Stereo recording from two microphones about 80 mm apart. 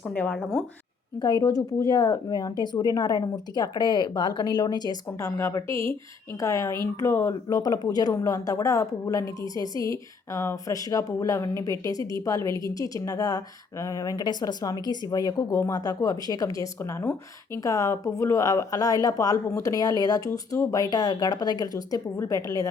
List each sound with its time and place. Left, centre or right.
0.0 s speech: centre
1.2 s speech: left
5.2 s speech: left
7.4 s speech: left
8.1 s a woman's voice: left
17.6 s a woman's voice: left